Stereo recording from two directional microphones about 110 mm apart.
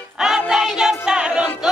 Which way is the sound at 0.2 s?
5° right (ahead or behind).